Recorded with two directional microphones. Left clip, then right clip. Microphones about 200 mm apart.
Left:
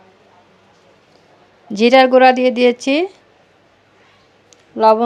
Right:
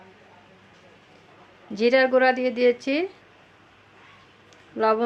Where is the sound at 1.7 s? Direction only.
40° left (ahead or behind).